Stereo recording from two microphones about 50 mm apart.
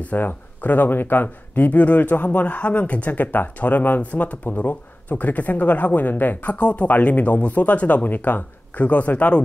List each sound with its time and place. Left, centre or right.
0.0 s speech: left